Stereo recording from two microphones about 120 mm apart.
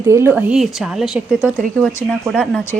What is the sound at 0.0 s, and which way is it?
Speech, 20° right (ahead or behind).